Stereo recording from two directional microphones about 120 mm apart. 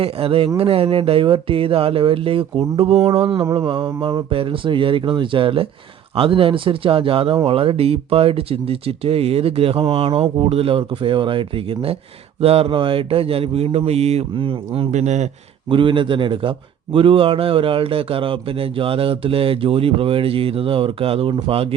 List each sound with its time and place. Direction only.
0.0 s a man's voice: 50° right (ahead or behind)
3.2 s a man's voice: 45° right (ahead or behind)
3.4 s mantra: 35° right (ahead or behind)
4.3 s a man's voice: 50° right (ahead or behind)
14.3 s a man's voice: 50° right (ahead or behind)
14.8 s speech: 75° right (ahead or behind)
15.7 s a man's voice: 45° right (ahead or behind)